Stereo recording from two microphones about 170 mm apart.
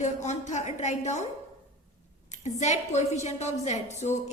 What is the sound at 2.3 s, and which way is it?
A woman's voice, 45° left (ahead or behind).